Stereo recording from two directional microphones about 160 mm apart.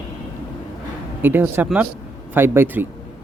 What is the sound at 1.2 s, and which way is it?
Speech, 10° right (ahead or behind).